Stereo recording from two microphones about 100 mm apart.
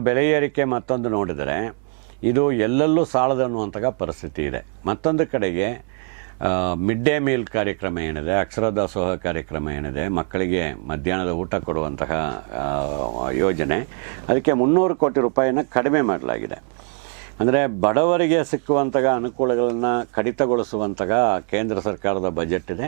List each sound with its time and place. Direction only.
0.0 s speech: 15° right (ahead or behind)